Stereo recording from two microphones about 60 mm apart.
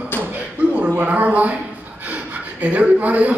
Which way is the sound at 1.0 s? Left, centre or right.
Right.